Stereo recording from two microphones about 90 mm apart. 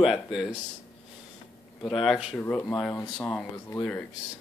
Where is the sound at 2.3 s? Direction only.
20° left (ahead or behind).